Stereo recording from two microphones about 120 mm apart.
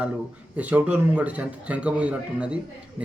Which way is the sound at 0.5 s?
10° right (ahead or behind).